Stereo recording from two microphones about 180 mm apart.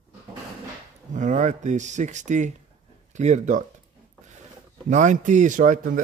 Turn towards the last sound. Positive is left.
turn(degrees=-45)  # may be behind; listen again after turning